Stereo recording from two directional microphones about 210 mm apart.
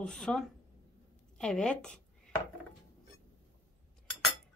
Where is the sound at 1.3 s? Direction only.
5° left (ahead or behind).